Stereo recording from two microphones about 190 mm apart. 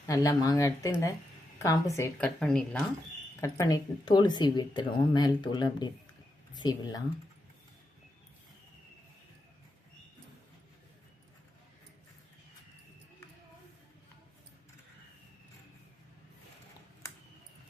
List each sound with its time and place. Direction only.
0.0 s speech: 15° left (ahead or behind)
2.2 s speech: 5° left (ahead or behind)
3.4 s speech: 20° left (ahead or behind)